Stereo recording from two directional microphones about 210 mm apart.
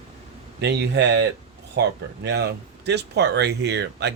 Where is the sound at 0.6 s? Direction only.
55° right (ahead or behind).